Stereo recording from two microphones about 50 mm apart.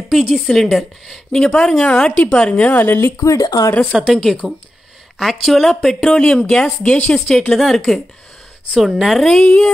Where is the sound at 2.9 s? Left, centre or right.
Left.